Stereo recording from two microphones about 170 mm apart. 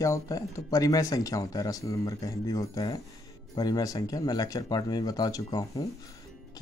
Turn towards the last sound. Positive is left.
turn(degrees=20)  # may be behind; listen again after turning